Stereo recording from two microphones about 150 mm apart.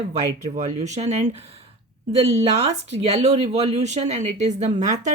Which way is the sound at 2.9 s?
45° right (ahead or behind).